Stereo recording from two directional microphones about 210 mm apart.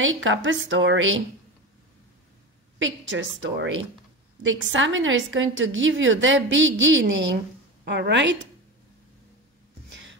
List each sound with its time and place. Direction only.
0.0 s a woman's voice: 65° right (ahead or behind)
2.8 s a woman's voice: 65° right (ahead or behind)